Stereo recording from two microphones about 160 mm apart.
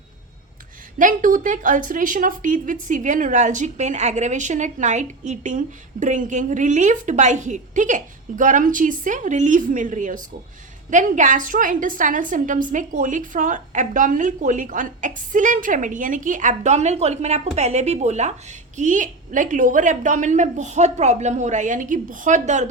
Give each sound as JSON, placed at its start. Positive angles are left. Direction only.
{"t": 0.9, "sound": "a woman's voice", "side_deg": -55}